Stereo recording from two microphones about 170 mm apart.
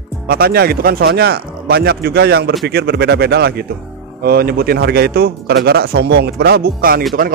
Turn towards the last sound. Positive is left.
turn(degrees=-60)  # may be behind; listen again after turning